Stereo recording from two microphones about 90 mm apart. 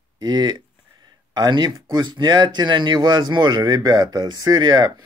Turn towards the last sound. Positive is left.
turn(degrees=-50)  # may be behind; listen again after turning